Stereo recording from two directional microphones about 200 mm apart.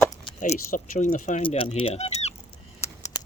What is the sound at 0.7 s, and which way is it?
Speech, 45° left (ahead or behind).